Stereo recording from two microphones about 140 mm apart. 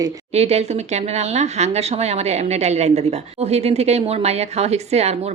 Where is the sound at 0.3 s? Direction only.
50° right (ahead or behind).